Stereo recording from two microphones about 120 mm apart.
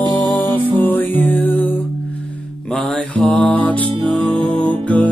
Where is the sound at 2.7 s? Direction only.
5° left (ahead or behind).